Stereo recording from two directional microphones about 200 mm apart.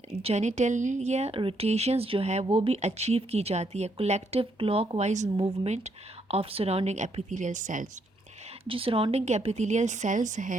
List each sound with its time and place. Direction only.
0.2 s speech: 30° right (ahead or behind)
8.6 s speech: 25° right (ahead or behind)